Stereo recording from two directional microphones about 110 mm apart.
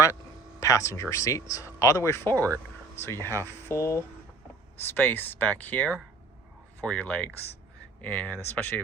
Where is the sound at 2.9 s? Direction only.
25° left (ahead or behind).